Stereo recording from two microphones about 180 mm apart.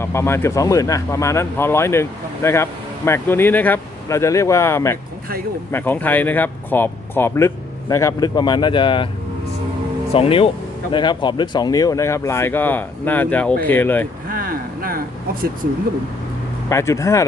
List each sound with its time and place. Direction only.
0.0 s speech: 15° left (ahead or behind)
10.1 s speech: 30° left (ahead or behind); by 14.1 s 10° left (ahead or behind)
14.3 s a sound: 50° right (ahead or behind)
16.6 s speech: 15° left (ahead or behind)